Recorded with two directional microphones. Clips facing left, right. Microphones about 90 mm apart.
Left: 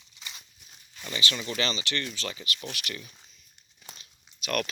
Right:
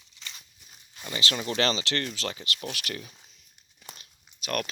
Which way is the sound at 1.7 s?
90° right.